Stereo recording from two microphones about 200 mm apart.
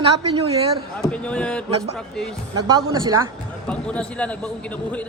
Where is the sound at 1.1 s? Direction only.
5° left (ahead or behind).